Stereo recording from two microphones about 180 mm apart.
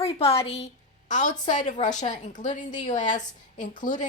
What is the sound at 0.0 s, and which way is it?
A woman's voice, 35° left (ahead or behind).